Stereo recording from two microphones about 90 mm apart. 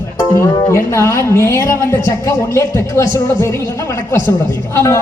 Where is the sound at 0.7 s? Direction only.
30° left (ahead or behind).